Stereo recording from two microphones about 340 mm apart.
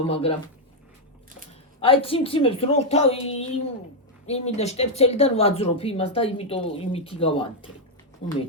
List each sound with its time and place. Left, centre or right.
0.0 s speech: centre
1.8 s speech: centre